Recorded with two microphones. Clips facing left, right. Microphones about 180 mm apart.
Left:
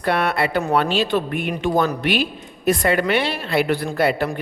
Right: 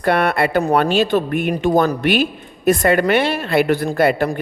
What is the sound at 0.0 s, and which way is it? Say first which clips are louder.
A woman's voice: right 4 dB; 50° right (ahead or behind).